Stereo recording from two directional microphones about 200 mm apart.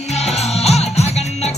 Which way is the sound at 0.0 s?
35° left (ahead or behind).